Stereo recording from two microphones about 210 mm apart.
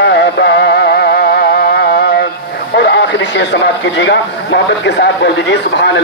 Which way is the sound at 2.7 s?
55° left (ahead or behind).